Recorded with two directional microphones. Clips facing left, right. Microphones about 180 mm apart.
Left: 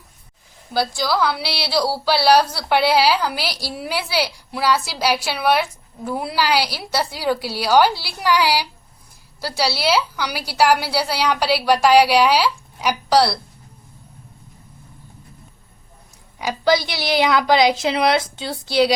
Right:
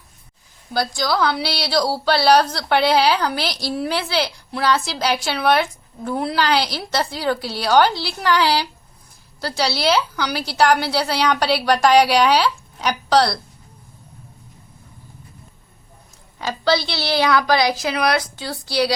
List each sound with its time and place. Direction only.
0.7 s speech: 5° left (ahead or behind)
16.4 s a woman's voice: 15° left (ahead or behind)